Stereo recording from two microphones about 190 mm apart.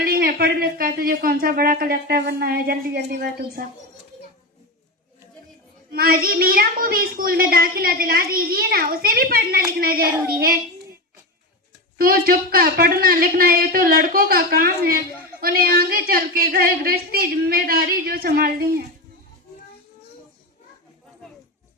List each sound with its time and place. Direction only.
0.0 s speech: 50° right (ahead or behind)
5.9 s a woman's voice: 50° right (ahead or behind)
11.9 s a woman's voice: 50° right (ahead or behind)